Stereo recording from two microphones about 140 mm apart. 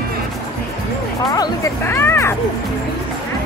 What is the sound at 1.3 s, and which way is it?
Music, 20° left (ahead or behind).